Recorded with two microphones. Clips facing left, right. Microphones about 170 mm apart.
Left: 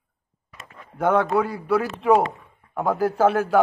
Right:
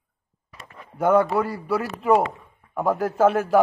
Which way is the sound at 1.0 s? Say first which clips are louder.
Right 1 dB; 5° right (ahead or behind).